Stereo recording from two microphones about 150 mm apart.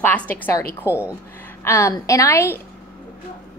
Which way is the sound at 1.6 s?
20° left (ahead or behind).